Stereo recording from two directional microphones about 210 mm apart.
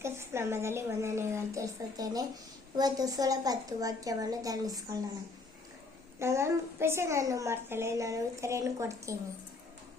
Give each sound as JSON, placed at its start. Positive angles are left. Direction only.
{"t": 0.0, "sound": "a woman's voice", "side_deg": -10}
{"t": 6.1, "sound": "a woman's voice", "side_deg": -15}